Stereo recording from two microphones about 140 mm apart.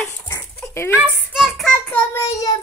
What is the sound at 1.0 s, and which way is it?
Child singing, 5° right (ahead or behind).